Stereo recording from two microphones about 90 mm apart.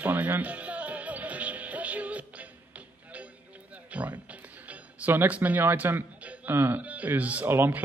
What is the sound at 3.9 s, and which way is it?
Speech, 15° right (ahead or behind).